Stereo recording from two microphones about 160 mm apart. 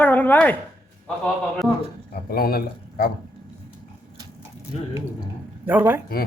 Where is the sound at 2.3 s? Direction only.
70° left (ahead or behind).